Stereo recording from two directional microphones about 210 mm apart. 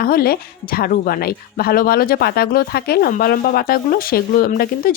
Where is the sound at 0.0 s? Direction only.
45° left (ahead or behind).